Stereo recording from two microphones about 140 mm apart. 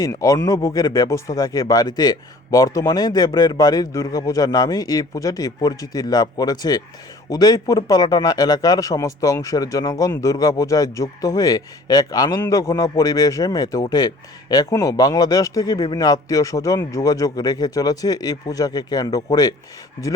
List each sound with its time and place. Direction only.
0.0 s speech: 25° left (ahead or behind)